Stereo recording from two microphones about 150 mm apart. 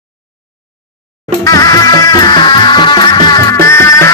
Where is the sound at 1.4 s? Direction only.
25° left (ahead or behind).